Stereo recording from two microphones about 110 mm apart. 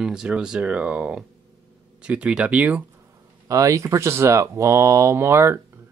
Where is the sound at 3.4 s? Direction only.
30° right (ahead or behind).